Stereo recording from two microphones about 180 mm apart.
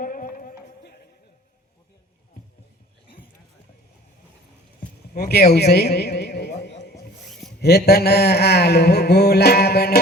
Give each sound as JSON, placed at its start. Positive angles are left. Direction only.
{"t": 0.0, "sound": "run", "side_deg": 50}
{"t": 5.1, "sound": "a man's voice", "side_deg": 60}
{"t": 7.6, "sound": "a sound", "side_deg": 65}